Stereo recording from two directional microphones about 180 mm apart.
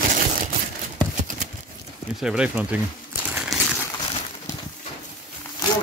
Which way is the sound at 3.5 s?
Centre (ahead or behind).